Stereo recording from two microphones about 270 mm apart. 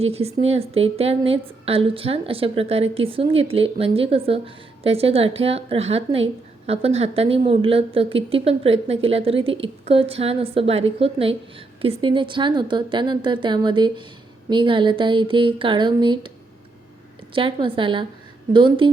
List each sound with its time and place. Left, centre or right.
0.0 s a woman's voice: right
17.3 s a woman's voice: centre